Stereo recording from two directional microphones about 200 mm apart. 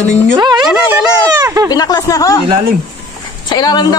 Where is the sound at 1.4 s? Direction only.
15° right (ahead or behind).